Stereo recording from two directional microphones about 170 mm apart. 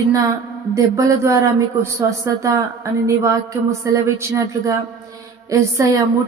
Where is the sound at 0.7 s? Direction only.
20° right (ahead or behind).